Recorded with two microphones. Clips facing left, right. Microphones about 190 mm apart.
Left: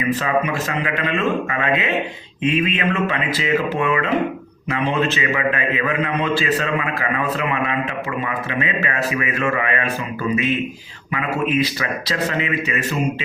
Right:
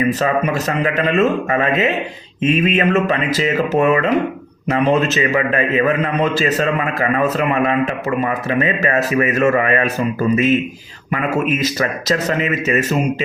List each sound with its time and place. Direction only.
0.1 s a man's voice: 40° right (ahead or behind)